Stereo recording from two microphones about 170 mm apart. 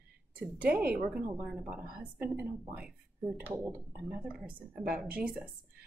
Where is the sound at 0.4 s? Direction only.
5° right (ahead or behind).